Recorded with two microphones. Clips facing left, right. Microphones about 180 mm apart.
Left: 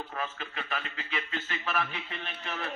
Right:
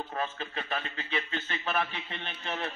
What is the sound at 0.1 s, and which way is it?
A man's voice, 30° right (ahead or behind).